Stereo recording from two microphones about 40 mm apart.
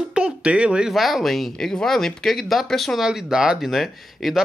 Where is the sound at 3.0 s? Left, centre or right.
Centre.